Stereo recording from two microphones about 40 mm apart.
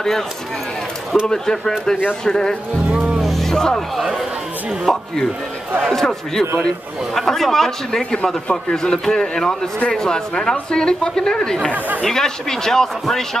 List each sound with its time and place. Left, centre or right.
1.2 s a woman's voice: centre
3.2 s music: centre
4.8 s a woman's voice: centre